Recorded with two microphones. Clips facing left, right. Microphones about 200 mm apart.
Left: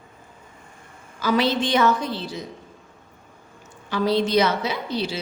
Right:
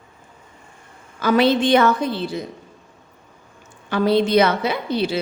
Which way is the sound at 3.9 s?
55° right (ahead or behind).